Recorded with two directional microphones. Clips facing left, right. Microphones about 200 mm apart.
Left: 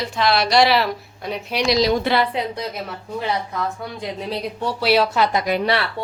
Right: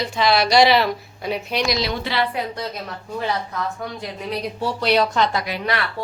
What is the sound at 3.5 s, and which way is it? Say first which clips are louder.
Speech: left 1 dB; 15° left (ahead or behind).